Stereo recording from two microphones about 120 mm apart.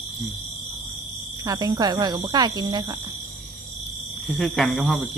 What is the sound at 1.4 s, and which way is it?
Speech, 30° right (ahead or behind).